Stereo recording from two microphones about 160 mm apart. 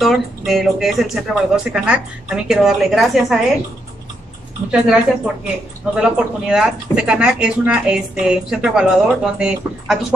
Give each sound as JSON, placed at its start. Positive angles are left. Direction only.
{"t": 0.0, "sound": "speech", "side_deg": 0}
{"t": 4.6, "sound": "speech", "side_deg": -5}